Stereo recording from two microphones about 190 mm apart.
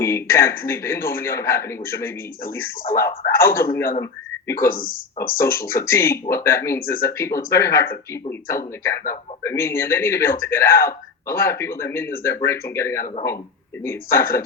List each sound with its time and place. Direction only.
0.0 s speech: 15° left (ahead or behind)
4.7 s speech: 50° left (ahead or behind)
5.4 s speech: 15° left (ahead or behind)